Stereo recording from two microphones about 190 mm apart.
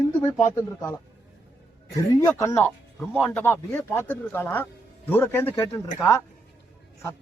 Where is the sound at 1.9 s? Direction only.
15° left (ahead or behind).